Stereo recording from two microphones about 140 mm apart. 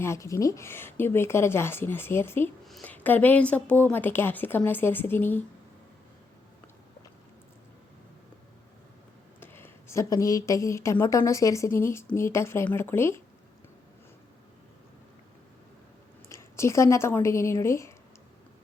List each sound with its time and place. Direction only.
0.0 s a woman's voice: 20° left (ahead or behind)
2.6 s a woman's voice: centre (ahead or behind)
2.9 s a woman's voice: 10° left (ahead or behind)
9.4 s a woman's voice: 15° left (ahead or behind)
16.3 s speech: 20° left (ahead or behind)